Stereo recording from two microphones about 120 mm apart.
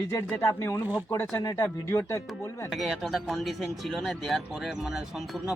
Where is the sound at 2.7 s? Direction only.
Centre (ahead or behind).